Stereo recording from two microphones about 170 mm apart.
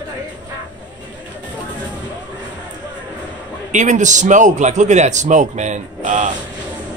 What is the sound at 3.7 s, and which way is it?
A man's voice, 45° right (ahead or behind).